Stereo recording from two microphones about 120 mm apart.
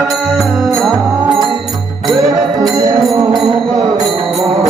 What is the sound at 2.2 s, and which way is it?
Music, 30° right (ahead or behind).